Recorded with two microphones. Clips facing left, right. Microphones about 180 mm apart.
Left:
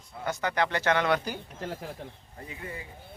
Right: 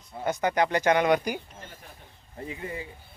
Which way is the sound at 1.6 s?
90° left.